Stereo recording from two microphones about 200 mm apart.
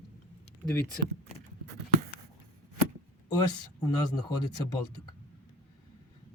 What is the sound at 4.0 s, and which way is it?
Speech, 20° left (ahead or behind).